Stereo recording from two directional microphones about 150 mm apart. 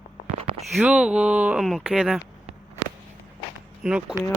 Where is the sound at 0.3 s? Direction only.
40° right (ahead or behind).